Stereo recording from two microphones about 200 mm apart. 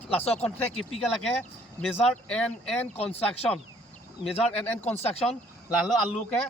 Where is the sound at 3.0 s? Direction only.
30° left (ahead or behind).